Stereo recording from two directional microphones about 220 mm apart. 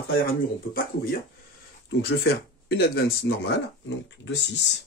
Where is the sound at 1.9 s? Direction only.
45° left (ahead or behind).